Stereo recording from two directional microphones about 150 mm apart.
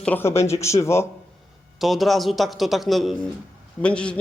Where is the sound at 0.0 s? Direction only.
15° left (ahead or behind).